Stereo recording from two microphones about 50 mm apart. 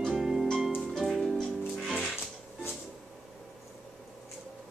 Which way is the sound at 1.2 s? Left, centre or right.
Centre.